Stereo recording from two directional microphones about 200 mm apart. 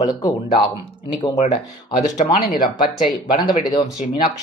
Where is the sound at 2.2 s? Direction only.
40° left (ahead or behind).